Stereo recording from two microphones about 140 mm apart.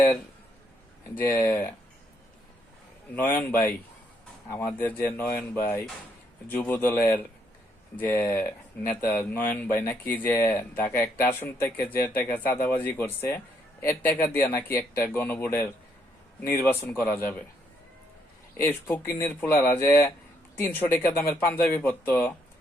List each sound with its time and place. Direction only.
1.3 s speech: 15° left (ahead or behind)
3.2 s speech: 15° left (ahead or behind)
18.5 s speech: 15° left (ahead or behind)